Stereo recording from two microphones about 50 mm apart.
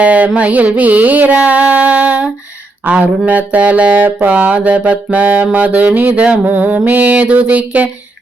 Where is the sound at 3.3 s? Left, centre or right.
Right.